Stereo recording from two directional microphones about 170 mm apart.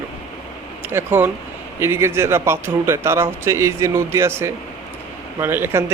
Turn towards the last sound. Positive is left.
turn(degrees=-15)  # may be behind; listen again after turning